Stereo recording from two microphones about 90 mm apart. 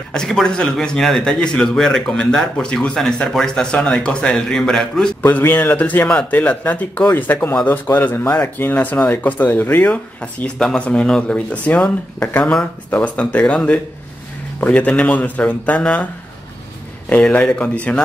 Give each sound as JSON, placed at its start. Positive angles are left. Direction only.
{"t": 0.1, "sound": "speech", "side_deg": 5}
{"t": 5.2, "sound": "a man's voice", "side_deg": 20}
{"t": 17.1, "sound": "speech", "side_deg": 15}